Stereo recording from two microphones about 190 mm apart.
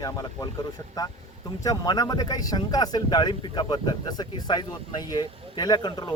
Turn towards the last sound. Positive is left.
turn(degrees=20)  # may be behind; listen again after turning